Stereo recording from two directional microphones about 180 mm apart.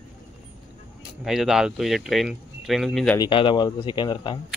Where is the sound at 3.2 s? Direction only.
30° left (ahead or behind).